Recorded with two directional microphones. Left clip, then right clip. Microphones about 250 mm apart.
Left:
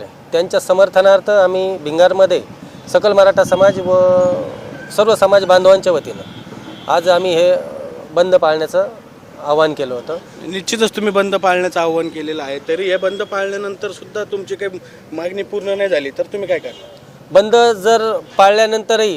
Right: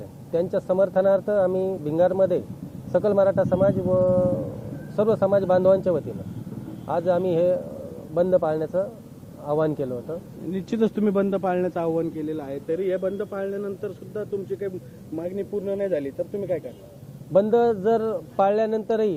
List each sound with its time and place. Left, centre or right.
0.5 s a man's voice: centre
4.9 s a man's voice: centre